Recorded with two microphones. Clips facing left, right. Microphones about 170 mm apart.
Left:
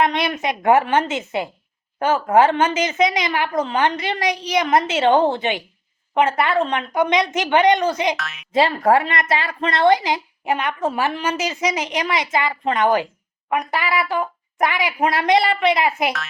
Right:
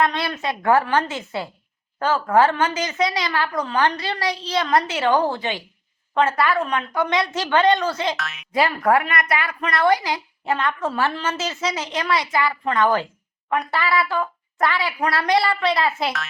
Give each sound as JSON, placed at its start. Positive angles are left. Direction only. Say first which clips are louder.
{"t": 0.0, "sound": "a woman's voice", "louder": "left 2 dB", "side_deg": 20}
{"t": 8.1, "sound": "speech", "louder": "left 1 dB", "side_deg": 0}
{"t": 8.5, "sound": "a woman's voice", "louder": "left 2 dB", "side_deg": 25}